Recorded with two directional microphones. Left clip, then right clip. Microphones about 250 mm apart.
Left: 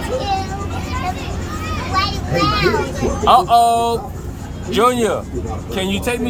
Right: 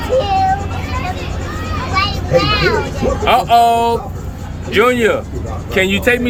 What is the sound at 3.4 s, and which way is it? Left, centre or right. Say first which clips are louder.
Speech: right 2 dB; left.